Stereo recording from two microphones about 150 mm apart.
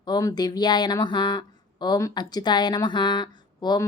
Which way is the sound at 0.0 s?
25° left (ahead or behind).